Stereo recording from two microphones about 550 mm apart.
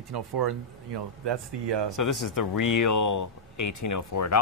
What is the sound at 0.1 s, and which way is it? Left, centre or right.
Speech, right.